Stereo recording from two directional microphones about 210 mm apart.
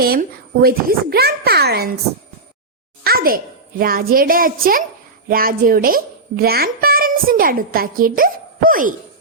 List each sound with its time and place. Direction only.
0.0 s a child's voice: 45° right (ahead or behind)
3.0 s a child's voice: 45° right (ahead or behind)